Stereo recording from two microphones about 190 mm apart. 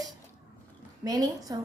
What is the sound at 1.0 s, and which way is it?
Speech, 20° right (ahead or behind).